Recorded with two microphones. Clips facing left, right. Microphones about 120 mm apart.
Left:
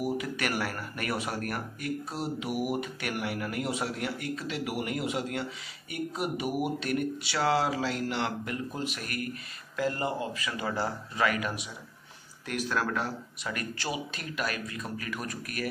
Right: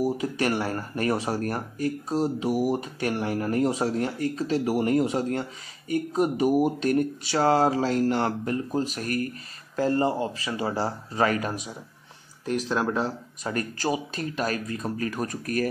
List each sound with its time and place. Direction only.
0.0 s speech: 30° right (ahead or behind)
12.4 s speech: 25° right (ahead or behind)